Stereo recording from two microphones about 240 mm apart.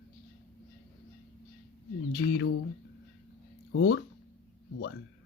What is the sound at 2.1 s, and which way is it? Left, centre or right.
Speech, left.